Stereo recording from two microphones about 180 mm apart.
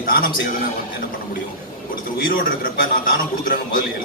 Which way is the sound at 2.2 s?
50° left (ahead or behind).